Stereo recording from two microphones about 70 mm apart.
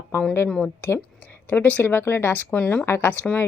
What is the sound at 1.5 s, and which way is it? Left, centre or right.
A woman's voice, left.